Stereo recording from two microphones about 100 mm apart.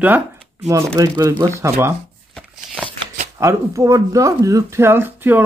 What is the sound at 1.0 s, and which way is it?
Speech, 35° right (ahead or behind).